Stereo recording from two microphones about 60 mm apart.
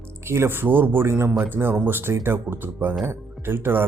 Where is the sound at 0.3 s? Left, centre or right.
Right.